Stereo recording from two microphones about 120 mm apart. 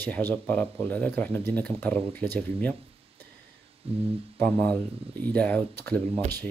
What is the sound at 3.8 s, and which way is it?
Speech, 55° right (ahead or behind).